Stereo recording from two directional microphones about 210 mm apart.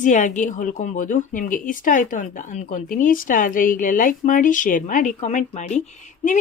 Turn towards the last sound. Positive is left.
turn(degrees=35)  # may be behind; listen again after turning